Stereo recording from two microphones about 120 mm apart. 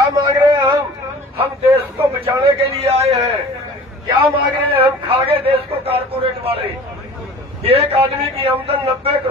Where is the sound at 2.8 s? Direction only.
60° right (ahead or behind).